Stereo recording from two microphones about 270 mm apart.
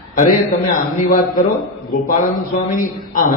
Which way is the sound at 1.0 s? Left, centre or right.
Left.